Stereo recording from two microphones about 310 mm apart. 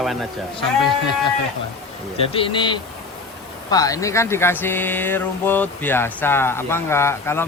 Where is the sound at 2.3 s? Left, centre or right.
Centre.